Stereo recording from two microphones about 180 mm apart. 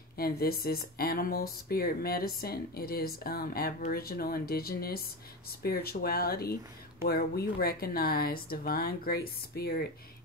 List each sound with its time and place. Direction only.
0.2 s speech: 55° left (ahead or behind)